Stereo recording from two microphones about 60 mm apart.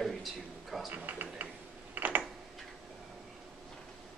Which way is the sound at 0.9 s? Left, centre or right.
Right.